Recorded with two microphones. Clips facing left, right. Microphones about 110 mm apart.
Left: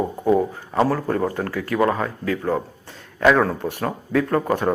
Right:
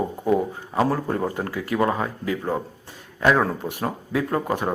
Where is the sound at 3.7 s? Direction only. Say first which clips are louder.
Left 3 dB; 15° right (ahead or behind).